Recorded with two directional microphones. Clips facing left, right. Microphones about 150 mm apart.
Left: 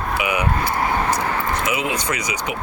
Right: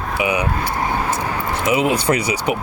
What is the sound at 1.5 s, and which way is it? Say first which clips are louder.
Speech: right 5 dB; 35° right (ahead or behind).